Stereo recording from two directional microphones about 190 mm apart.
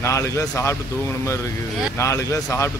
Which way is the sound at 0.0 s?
15° left (ahead or behind).